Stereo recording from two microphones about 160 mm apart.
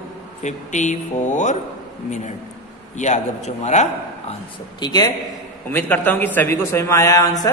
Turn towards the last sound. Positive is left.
turn(degrees=20)  # may be behind; listen again after turning